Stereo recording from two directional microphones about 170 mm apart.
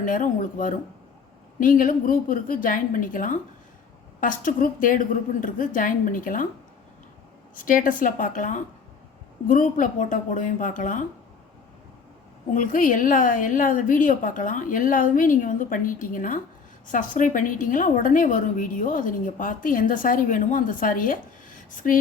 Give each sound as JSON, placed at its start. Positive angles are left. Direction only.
{"t": 0.0, "sound": "a woman's voice", "side_deg": 50}
{"t": 7.5, "sound": "a woman's voice", "side_deg": 55}
{"t": 12.5, "sound": "a woman's voice", "side_deg": 50}